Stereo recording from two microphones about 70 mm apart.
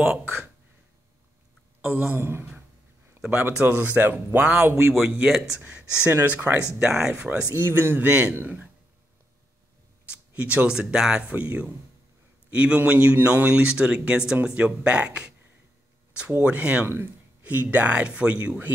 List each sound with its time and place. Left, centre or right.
0.2 s speech: right
1.8 s a sound: right
3.7 s speech: right
6.8 s speech: centre
7.5 s speech: right
10.0 s speech: centre
16.8 s speech: right